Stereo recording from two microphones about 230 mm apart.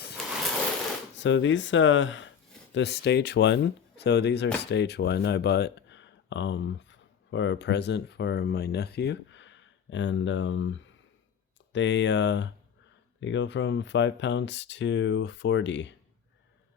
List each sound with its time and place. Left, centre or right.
1.2 s speech: left